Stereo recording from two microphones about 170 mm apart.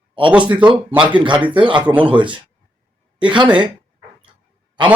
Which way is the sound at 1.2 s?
30° right (ahead or behind).